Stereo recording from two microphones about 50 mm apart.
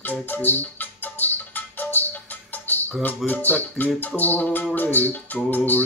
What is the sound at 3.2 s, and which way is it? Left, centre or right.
Mantra, left.